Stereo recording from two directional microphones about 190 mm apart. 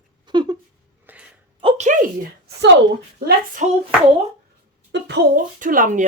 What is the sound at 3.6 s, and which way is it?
Hands, 40° right (ahead or behind).